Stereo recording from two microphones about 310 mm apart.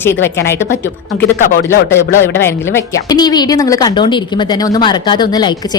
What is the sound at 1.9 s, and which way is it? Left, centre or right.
A woman's voice, centre.